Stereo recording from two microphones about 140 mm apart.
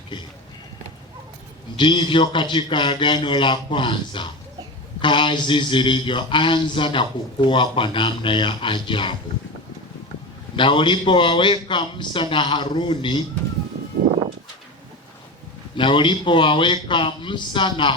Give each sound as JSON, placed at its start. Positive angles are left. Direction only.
{"t": 1.7, "sound": "a man's voice", "side_deg": 35}
{"t": 10.5, "sound": "a man's voice", "side_deg": 35}
{"t": 14.0, "sound": "a sound", "side_deg": -65}
{"t": 15.8, "sound": "a man's voice", "side_deg": 35}